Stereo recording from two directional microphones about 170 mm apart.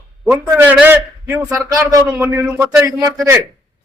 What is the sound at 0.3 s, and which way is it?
A man's voice, 10° right (ahead or behind).